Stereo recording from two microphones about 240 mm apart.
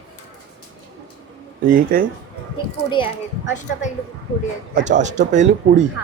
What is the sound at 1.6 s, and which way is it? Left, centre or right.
Speech, right.